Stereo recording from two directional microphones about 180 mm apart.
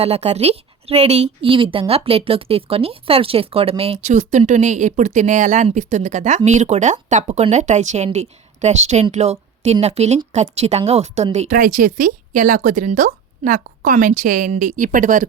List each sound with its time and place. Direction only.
0.0 s a woman's voice: 35° right (ahead or behind)
11.4 s speech: 50° right (ahead or behind)